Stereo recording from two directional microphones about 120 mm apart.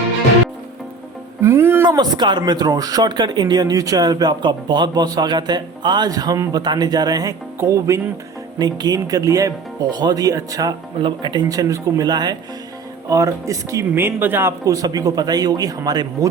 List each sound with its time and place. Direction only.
1.4 s music: 20° right (ahead or behind)
2.0 s speech: 40° right (ahead or behind)